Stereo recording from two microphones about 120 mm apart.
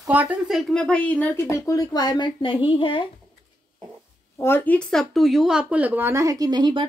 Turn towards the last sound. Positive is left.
turn(degrees=-35)  # may be behind; listen again after turning